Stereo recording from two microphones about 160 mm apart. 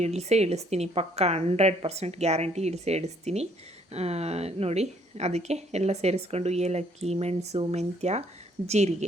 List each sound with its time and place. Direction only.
0.0 s a woman's voice: 45° right (ahead or behind)